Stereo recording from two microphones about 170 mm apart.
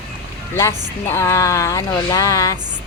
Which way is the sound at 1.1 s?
15° left (ahead or behind).